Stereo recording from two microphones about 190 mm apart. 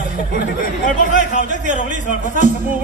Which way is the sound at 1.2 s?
40° right (ahead or behind).